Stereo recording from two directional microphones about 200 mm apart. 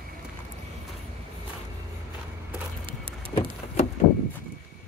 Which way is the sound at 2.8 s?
25° right (ahead or behind).